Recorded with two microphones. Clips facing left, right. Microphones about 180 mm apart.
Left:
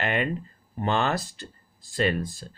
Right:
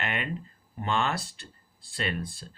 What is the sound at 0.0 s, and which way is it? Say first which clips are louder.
Speech: left 6 dB; 40° left (ahead or behind).